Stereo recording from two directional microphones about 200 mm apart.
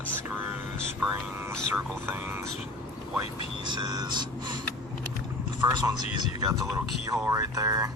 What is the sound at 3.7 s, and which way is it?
Speech, 20° right (ahead or behind).